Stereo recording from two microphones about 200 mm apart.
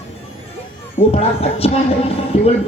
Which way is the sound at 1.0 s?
30° left (ahead or behind).